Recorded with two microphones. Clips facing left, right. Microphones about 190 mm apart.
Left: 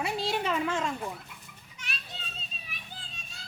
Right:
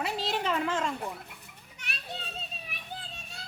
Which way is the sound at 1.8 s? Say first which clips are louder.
Right 4 dB; 60° right (ahead or behind).